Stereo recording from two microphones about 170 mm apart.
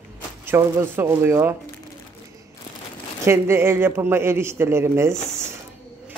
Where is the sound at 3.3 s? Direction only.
15° right (ahead or behind).